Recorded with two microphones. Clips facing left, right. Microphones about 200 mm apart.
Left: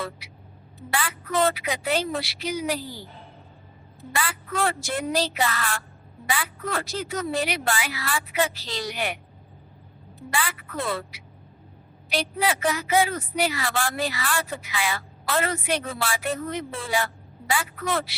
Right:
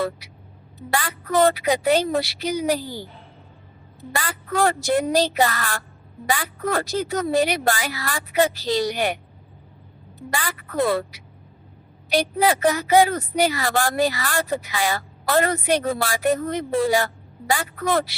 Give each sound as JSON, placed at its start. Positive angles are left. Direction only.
{"t": 0.9, "sound": "a woman's voice", "side_deg": -40}
{"t": 4.1, "sound": "a woman's voice", "side_deg": -40}
{"t": 10.2, "sound": "a woman's voice", "side_deg": -40}